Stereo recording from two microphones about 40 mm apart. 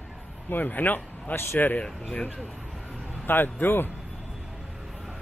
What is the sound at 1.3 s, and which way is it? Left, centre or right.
Speech, left.